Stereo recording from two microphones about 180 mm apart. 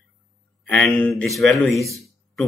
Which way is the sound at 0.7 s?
5° left (ahead or behind).